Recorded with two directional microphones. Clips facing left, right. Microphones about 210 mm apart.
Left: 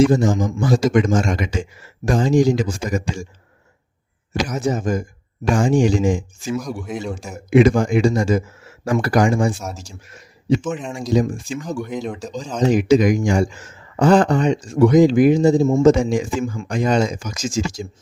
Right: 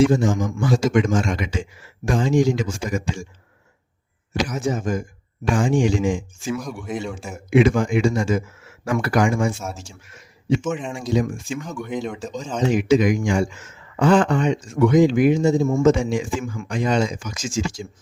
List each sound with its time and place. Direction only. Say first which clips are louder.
0.0 s a man's voice: left 2 dB; 40° left (ahead or behind)
4.4 s a man's voice: left 4 dB; 40° left (ahead or behind)
6.6 s speech: left 1 dB; centre (ahead or behind)
7.5 s a man's voice: left 3 dB; 40° left (ahead or behind)
11.9 s speech: left 1 dB; centre (ahead or behind)
12.6 s a man's voice: left 3 dB; 40° left (ahead or behind)